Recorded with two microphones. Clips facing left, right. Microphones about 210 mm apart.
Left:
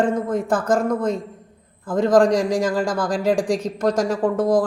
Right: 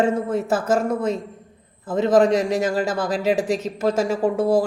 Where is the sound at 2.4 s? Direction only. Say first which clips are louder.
Left 1 dB; 25° right (ahead or behind).